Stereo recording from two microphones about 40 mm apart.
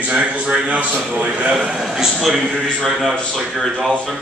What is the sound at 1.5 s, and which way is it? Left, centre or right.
Speech, centre.